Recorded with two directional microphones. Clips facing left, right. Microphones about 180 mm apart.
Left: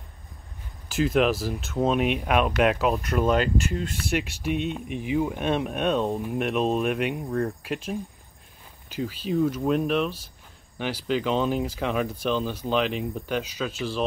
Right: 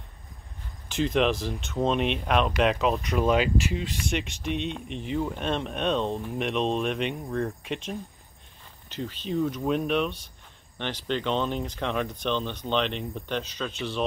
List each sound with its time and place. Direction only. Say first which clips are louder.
0.8 s speech: left 2 dB; 5° left (ahead or behind)